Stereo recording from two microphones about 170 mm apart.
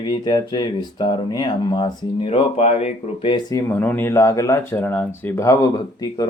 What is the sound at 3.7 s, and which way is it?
Speech, 10° left (ahead or behind).